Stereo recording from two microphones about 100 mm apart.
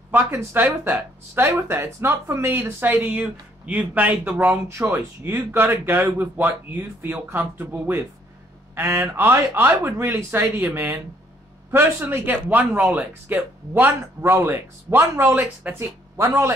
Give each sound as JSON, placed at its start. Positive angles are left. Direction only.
{"t": 0.1, "sound": "speech", "side_deg": -20}
{"t": 4.6, "sound": "speech", "side_deg": -25}
{"t": 12.3, "sound": "speech", "side_deg": -15}